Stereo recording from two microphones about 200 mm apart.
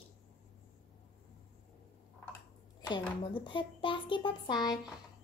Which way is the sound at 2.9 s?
25° left (ahead or behind).